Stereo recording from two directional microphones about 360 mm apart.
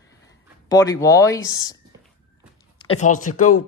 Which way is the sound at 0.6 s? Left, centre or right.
Centre.